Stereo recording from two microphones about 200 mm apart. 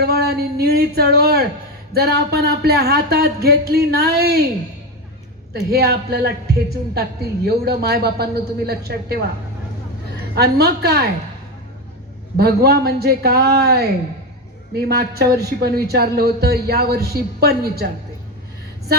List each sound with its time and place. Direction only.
0.0 s speech: 50° right (ahead or behind)
5.7 s speech: 50° right (ahead or behind)
10.3 s speech: 55° right (ahead or behind)
12.4 s speech: 50° right (ahead or behind)